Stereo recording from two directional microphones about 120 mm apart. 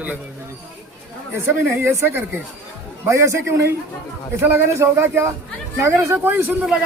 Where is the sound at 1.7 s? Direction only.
20° right (ahead or behind).